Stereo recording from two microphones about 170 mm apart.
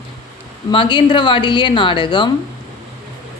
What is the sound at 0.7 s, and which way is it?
A woman's voice, 30° left (ahead or behind).